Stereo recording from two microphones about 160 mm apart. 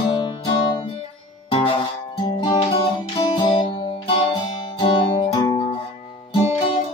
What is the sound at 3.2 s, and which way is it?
Music, 30° left (ahead or behind).